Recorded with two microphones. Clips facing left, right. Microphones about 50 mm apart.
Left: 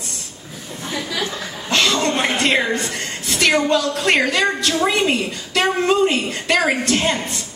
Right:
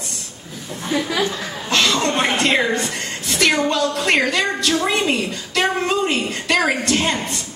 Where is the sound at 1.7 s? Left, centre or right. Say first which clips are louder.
Even; left.